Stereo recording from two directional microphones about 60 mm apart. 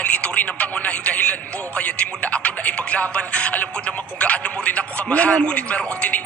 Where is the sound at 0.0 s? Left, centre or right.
Left.